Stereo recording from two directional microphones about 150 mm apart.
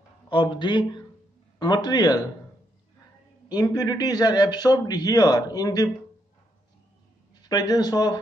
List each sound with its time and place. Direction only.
0.3 s a man's voice: 30° left (ahead or behind)
3.4 s a man's voice: 25° left (ahead or behind)
7.4 s a man's voice: 25° left (ahead or behind)